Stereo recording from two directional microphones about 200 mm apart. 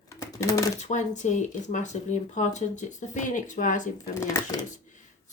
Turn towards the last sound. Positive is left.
turn(degrees=15)  # may be behind; listen again after turning